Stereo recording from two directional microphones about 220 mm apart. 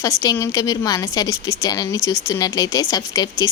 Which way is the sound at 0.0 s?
15° left (ahead or behind).